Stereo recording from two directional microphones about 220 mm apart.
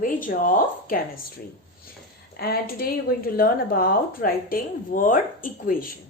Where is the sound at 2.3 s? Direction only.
45° left (ahead or behind).